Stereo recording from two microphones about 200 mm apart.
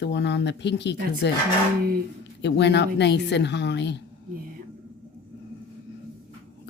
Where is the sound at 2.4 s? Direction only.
60° left (ahead or behind).